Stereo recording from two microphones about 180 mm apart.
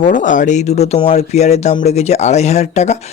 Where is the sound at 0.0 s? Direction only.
45° left (ahead or behind).